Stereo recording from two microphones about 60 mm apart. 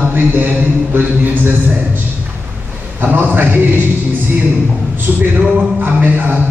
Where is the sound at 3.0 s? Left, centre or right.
Right.